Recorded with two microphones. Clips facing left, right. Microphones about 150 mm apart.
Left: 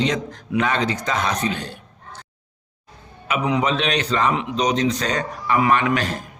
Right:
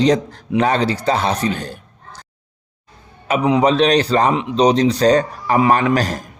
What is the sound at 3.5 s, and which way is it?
Speech, 35° right (ahead or behind).